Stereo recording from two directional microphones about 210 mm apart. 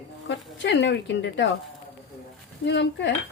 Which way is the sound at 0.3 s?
55° left (ahead or behind).